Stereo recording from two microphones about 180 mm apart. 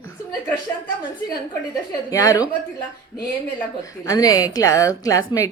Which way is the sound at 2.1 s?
20° left (ahead or behind).